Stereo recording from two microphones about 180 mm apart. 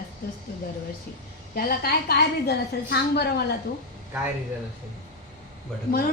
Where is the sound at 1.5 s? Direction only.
60° left (ahead or behind).